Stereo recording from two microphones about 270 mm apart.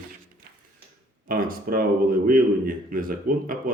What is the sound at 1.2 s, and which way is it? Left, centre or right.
A man's voice, right.